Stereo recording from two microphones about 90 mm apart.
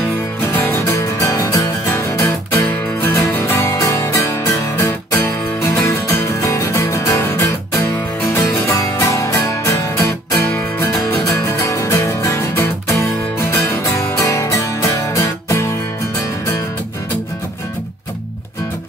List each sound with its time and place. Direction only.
0.5 s music: 25° left (ahead or behind)
0.8 s music: 40° left (ahead or behind)
6.0 s music: 35° left (ahead or behind)
8.2 s music: 20° left (ahead or behind)
8.7 s music: 40° left (ahead or behind)